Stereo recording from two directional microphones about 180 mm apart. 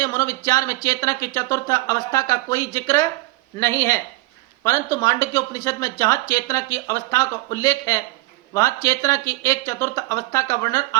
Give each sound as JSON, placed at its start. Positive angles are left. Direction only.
{"t": 0.0, "sound": "speech", "side_deg": 20}